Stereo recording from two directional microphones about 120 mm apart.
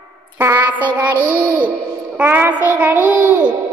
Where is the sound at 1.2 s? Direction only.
40° right (ahead or behind).